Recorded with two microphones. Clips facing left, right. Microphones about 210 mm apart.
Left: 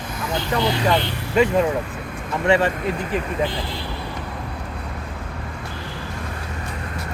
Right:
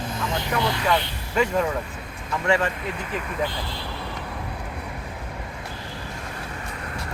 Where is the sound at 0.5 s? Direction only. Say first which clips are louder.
Left 4 dB; 25° left (ahead or behind).